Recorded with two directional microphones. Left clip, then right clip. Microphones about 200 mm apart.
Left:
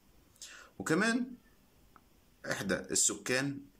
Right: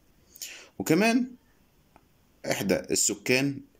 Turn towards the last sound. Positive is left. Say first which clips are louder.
# right 7 dB
turn(degrees=-5)  # may be behind; listen again after turning